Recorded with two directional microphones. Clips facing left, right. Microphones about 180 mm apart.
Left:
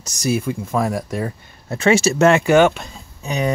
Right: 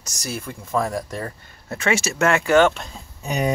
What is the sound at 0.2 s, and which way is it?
Speech, 10° left (ahead or behind).